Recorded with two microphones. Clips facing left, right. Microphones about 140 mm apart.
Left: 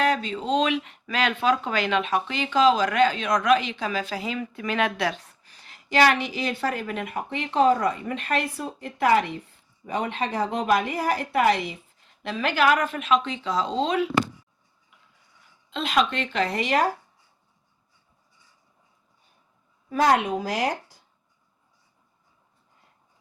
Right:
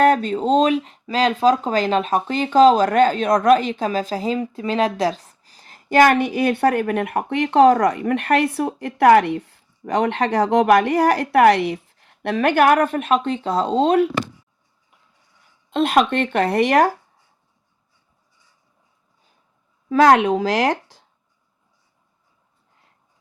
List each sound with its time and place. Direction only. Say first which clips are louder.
0.0 s speech: right 8 dB; 50° right (ahead or behind)
15.7 s speech: right 7 dB; 55° right (ahead or behind)
19.9 s speech: right 7 dB; 90° right